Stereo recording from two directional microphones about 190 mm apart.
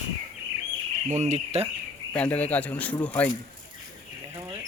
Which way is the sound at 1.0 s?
40° right (ahead or behind).